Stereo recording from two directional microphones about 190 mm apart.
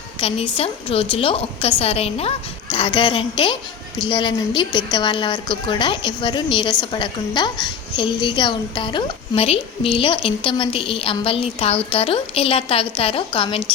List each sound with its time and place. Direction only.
0.2 s a woman's voice: 30° left (ahead or behind)